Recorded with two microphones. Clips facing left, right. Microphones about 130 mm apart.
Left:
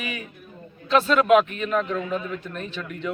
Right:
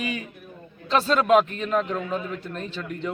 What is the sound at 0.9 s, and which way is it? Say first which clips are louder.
A man's voice: left 2 dB; 30° right (ahead or behind).